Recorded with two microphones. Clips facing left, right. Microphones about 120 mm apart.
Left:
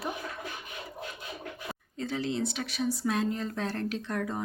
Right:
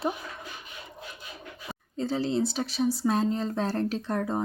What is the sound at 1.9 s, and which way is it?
A woman's voice, 30° right (ahead or behind).